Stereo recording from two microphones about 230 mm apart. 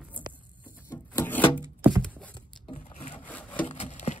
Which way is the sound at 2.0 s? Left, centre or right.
Centre.